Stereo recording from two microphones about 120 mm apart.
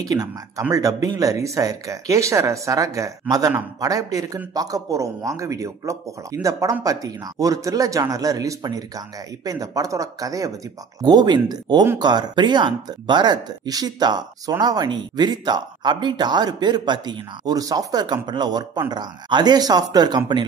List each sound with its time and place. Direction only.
0.0 s speech: 30° right (ahead or behind)